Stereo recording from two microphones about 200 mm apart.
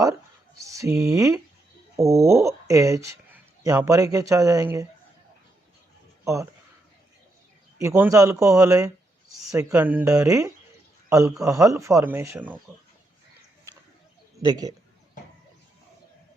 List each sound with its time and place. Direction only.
0.7 s speech: 15° right (ahead or behind)
6.2 s speech: 15° right (ahead or behind)
7.8 s speech: 10° right (ahead or behind)
14.3 s a man's voice: 20° right (ahead or behind)